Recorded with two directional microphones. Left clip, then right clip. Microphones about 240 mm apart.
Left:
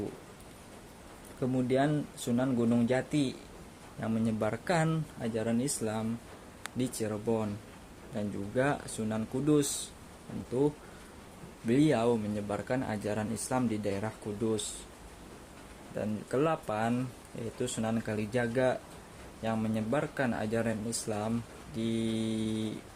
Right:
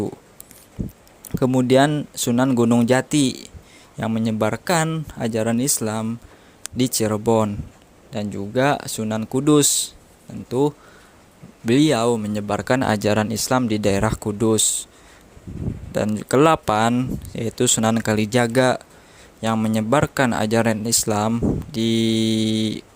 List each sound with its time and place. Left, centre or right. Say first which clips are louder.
1.4 s speech: right 13 dB; right
16.0 s speech: right 14 dB; right